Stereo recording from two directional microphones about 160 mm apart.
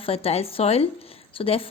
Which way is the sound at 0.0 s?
35° left (ahead or behind).